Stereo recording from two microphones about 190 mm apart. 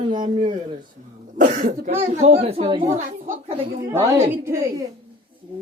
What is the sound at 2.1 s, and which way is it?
Speech, 35° right (ahead or behind).